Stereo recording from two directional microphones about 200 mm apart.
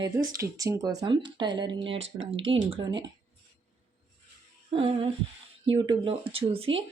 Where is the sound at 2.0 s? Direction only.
70° right (ahead or behind).